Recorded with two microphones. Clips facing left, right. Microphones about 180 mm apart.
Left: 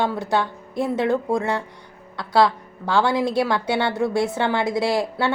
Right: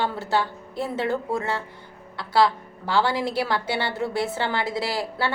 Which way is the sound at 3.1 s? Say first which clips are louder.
Left 4 dB; 15° left (ahead or behind).